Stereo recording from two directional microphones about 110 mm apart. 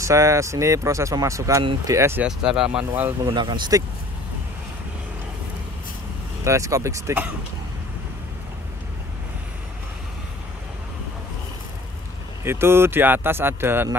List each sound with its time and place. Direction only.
0.0 s speech: 25° right (ahead or behind)
2.2 s speech: 5° right (ahead or behind)
2.8 s speech: 15° right (ahead or behind)
3.3 s speech: 45° right (ahead or behind)
6.4 s speech: 30° right (ahead or behind)
12.4 s speech: 20° right (ahead or behind)